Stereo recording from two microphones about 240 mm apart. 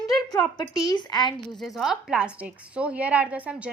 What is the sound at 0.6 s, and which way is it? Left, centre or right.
Speech, centre.